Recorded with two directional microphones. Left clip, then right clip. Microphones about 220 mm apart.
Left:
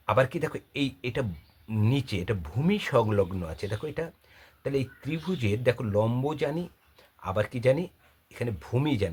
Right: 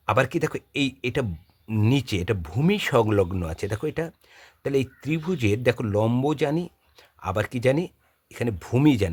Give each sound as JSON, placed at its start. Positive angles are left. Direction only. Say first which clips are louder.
{"t": 0.0, "sound": "speech", "louder": "right 3 dB", "side_deg": -45}